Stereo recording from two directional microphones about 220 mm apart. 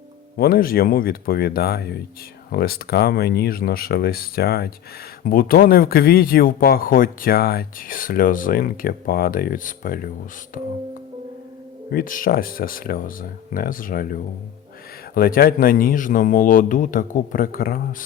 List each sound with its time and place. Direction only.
0.3 s speech: 40° left (ahead or behind)
11.9 s speech: 40° left (ahead or behind)